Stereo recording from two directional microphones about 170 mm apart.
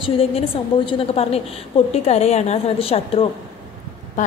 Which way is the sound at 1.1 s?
35° left (ahead or behind).